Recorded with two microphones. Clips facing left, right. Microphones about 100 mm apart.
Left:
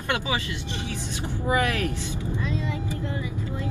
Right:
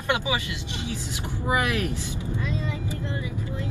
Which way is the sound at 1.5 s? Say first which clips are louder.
Left 1 dB; 20° right (ahead or behind).